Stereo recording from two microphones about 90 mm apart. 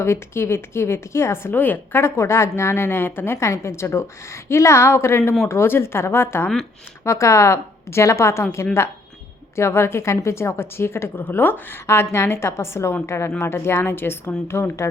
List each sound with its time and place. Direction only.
0.0 s a woman's voice: 30° left (ahead or behind)
9.6 s speech: 30° left (ahead or behind)